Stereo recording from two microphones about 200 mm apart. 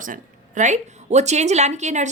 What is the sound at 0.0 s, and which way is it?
A woman's voice, 40° right (ahead or behind).